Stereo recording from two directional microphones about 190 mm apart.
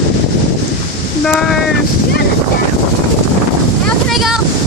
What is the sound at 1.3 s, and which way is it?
Speech, 5° left (ahead or behind).